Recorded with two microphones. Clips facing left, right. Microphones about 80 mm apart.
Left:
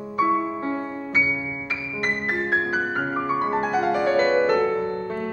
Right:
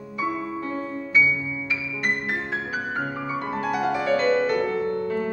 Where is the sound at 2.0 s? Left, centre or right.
Left.